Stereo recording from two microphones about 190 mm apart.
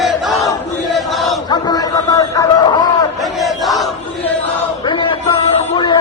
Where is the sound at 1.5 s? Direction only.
20° left (ahead or behind).